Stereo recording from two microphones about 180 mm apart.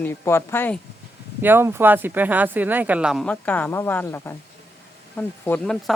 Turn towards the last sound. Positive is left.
turn(degrees=5)  # may be behind; listen again after turning